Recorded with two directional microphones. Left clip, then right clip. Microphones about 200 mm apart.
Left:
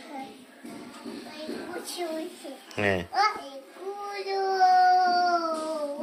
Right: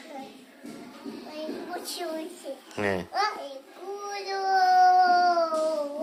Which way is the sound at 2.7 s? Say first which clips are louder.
Left 2 dB; 5° right (ahead or behind).